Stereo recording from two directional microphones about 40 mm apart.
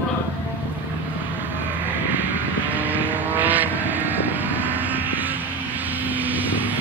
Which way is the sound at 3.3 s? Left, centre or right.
Right.